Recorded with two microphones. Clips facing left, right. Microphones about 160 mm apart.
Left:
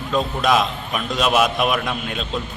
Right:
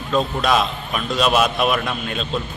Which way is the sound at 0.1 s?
Centre (ahead or behind).